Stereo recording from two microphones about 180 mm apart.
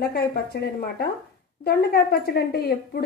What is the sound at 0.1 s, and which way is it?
Speech, 60° left (ahead or behind).